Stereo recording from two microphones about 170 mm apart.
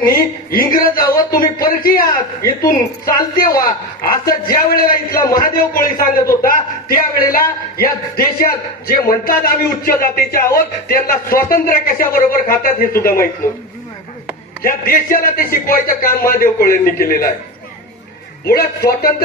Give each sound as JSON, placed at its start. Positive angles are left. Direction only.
{"t": 0.1, "sound": "a man's voice", "side_deg": 55}
{"t": 1.1, "sound": "a sound", "side_deg": 60}
{"t": 3.6, "sound": "a man's voice", "side_deg": 55}
{"t": 14.6, "sound": "a man's voice", "side_deg": 55}
{"t": 18.4, "sound": "a man's voice", "side_deg": 65}